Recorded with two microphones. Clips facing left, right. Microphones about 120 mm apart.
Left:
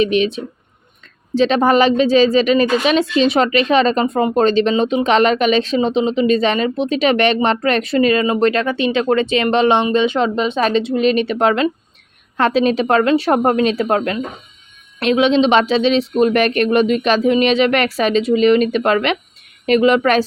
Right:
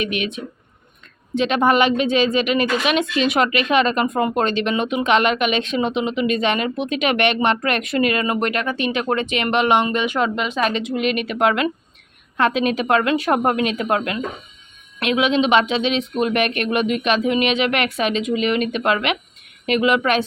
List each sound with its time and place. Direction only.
0.0 s speech: 30° left (ahead or behind)